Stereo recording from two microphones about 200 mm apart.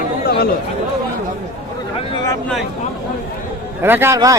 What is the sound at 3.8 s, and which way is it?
Speech, 10° right (ahead or behind).